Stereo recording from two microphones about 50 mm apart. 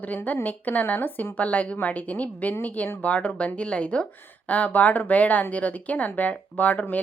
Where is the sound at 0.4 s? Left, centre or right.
Left.